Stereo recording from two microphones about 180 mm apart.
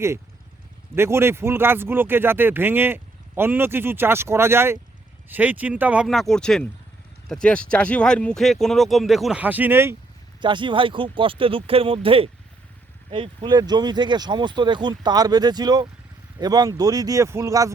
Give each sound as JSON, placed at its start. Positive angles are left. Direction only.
{"t": 0.9, "sound": "speech", "side_deg": -15}
{"t": 10.4, "sound": "speech", "side_deg": -25}